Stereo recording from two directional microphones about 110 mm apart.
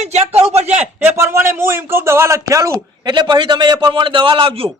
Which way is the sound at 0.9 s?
20° right (ahead or behind).